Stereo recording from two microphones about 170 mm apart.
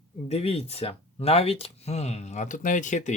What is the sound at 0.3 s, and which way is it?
Speech, 35° left (ahead or behind).